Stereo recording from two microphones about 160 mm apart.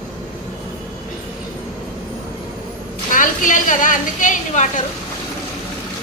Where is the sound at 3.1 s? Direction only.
55° left (ahead or behind).